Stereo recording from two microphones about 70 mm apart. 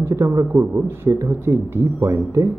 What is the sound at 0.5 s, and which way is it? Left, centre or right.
A man's voice, right.